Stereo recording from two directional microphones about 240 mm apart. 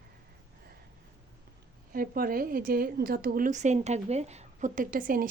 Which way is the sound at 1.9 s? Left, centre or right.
Right.